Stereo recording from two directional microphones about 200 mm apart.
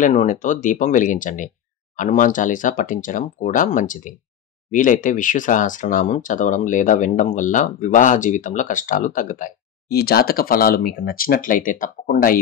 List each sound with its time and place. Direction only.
0.0 s speech: 40° left (ahead or behind)